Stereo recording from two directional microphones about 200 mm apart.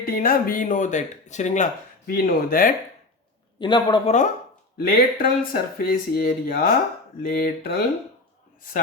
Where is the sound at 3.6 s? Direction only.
20° left (ahead or behind).